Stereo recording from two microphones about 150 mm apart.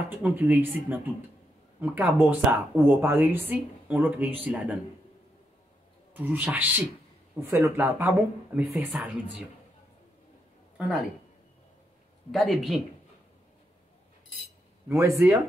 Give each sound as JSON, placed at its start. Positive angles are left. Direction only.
{"t": 0.2, "sound": "speech", "side_deg": -15}
{"t": 6.1, "sound": "speech", "side_deg": -10}
{"t": 12.3, "sound": "speech", "side_deg": 0}
{"t": 14.9, "sound": "speech", "side_deg": -20}